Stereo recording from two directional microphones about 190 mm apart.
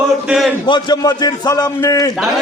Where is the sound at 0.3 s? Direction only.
Centre (ahead or behind).